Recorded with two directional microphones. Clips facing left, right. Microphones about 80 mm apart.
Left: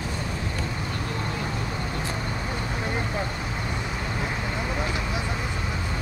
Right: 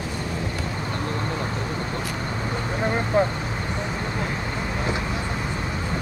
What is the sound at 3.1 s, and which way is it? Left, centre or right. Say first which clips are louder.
Vehicle: right 10 dB; right.